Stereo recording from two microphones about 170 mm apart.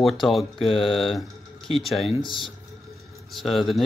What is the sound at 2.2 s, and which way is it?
Speech, 30° left (ahead or behind).